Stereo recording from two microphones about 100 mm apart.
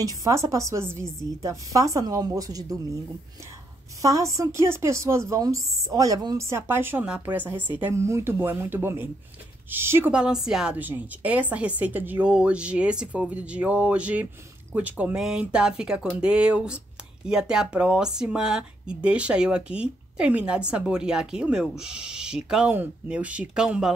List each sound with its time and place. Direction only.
0.0 s a woman's voice: 35° right (ahead or behind)
4.0 s a woman's voice: 35° right (ahead or behind)
6.4 s a woman's voice: 25° right (ahead or behind)
7.9 s a woman's voice: 30° right (ahead or behind)
10.1 s speech: 5° right (ahead or behind)
10.8 s speech: 15° right (ahead or behind)